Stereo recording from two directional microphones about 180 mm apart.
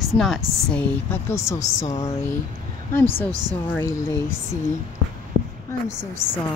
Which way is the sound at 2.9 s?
10° left (ahead or behind).